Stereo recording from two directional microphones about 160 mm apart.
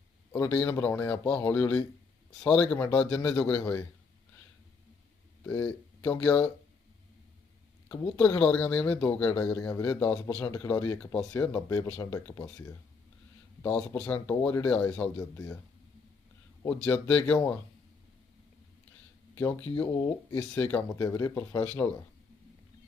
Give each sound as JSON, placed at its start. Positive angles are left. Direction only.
{"t": 0.3, "sound": "speech", "side_deg": 10}
{"t": 5.5, "sound": "speech", "side_deg": 10}
{"t": 7.9, "sound": "speech", "side_deg": 10}
{"t": 13.6, "sound": "speech", "side_deg": 5}
{"t": 16.6, "sound": "speech", "side_deg": 10}
{"t": 19.4, "sound": "speech", "side_deg": 10}